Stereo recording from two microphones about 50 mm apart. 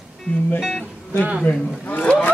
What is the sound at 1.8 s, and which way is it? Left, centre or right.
Speech, left.